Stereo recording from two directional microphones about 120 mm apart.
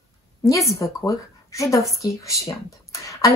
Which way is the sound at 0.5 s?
25° left (ahead or behind).